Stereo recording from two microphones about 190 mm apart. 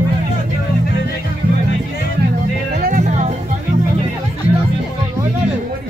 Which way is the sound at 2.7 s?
50° right (ahead or behind).